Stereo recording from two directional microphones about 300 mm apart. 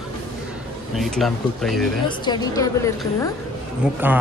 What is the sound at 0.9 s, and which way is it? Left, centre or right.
Speech, centre.